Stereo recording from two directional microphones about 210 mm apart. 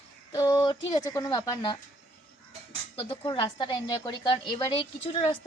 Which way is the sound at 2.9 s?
25° left (ahead or behind).